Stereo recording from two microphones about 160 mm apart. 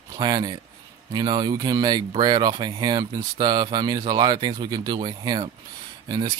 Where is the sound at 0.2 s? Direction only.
25° right (ahead or behind).